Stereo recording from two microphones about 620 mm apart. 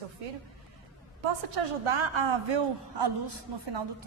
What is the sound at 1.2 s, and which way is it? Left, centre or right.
A woman's voice, right.